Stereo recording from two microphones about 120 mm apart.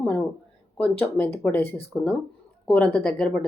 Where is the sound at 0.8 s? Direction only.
10° left (ahead or behind).